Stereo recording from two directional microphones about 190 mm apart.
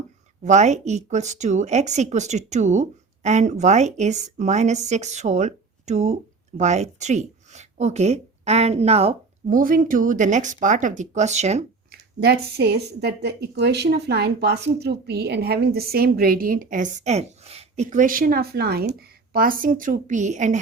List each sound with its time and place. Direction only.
0.4 s a woman's voice: 40° right (ahead or behind)
9.6 s a woman's voice: 45° right (ahead or behind)
11.9 s a woman's voice: 55° right (ahead or behind); by 20.6 s 40° right (ahead or behind)